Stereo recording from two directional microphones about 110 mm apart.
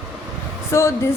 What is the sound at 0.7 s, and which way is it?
Speech, 25° left (ahead or behind).